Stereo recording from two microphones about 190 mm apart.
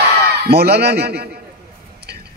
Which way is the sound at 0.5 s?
60° right (ahead or behind).